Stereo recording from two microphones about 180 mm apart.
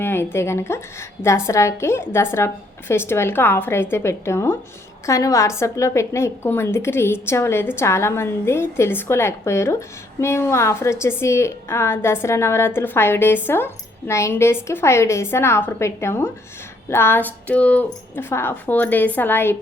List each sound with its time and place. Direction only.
0.0 s a woman's voice: 15° left (ahead or behind)